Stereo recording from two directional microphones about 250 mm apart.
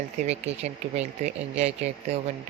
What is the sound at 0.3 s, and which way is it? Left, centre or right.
Speech, right.